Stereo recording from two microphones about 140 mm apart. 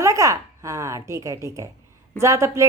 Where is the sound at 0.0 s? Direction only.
20° right (ahead or behind).